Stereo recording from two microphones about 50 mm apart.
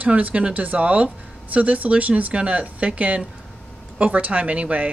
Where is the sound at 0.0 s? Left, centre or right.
Right.